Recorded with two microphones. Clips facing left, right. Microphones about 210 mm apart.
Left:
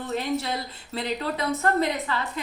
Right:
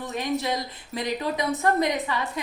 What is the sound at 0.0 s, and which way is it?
A woman's voice, 15° right (ahead or behind).